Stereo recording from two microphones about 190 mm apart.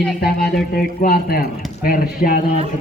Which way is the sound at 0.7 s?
50° left (ahead or behind).